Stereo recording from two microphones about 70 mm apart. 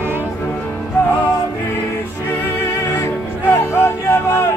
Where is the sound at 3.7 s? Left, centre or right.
Left.